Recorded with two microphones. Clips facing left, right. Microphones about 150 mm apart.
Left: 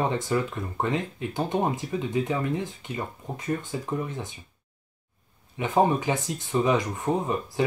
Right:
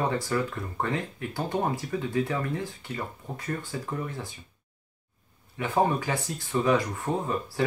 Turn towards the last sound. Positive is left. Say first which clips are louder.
# left 3 dB
turn(degrees=20)  # may be behind; listen again after turning